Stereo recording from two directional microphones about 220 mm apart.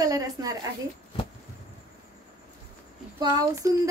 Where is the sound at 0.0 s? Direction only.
15° right (ahead or behind).